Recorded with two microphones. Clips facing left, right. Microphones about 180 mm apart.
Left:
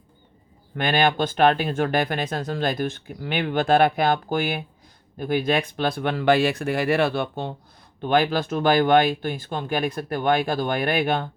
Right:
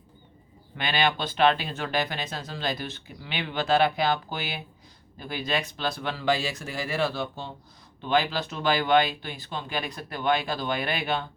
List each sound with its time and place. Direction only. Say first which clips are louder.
0.8 s speech: left 6 dB; 50° left (ahead or behind)